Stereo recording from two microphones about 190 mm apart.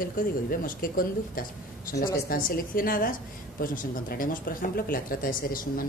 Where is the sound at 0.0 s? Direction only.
50° left (ahead or behind).